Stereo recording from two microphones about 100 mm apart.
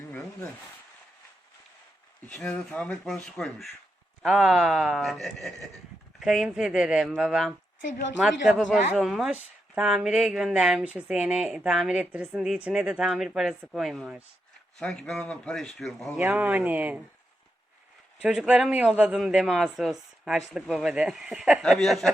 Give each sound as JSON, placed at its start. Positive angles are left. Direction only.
{"t": 2.2, "sound": "speech", "side_deg": 15}
{"t": 14.8, "sound": "speech", "side_deg": 5}
{"t": 16.3, "sound": "speech", "side_deg": -15}
{"t": 18.2, "sound": "speech", "side_deg": -10}
{"t": 21.6, "sound": "speech", "side_deg": 0}